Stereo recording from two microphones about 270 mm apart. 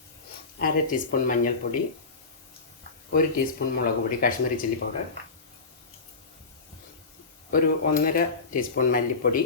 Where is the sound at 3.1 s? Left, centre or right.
Left.